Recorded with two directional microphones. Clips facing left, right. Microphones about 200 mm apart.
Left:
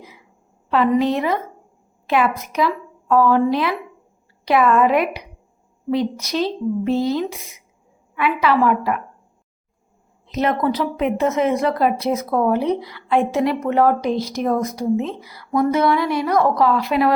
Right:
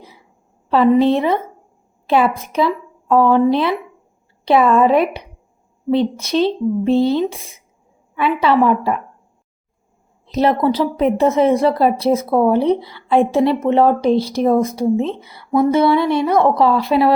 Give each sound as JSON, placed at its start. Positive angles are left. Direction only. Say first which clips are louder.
{"t": 0.0, "sound": "a sound", "louder": "even", "side_deg": -30}
{"t": 0.7, "sound": "speech", "louder": "right 5 dB", "side_deg": -30}
{"t": 10.2, "sound": "speech", "louder": "right 4 dB", "side_deg": -35}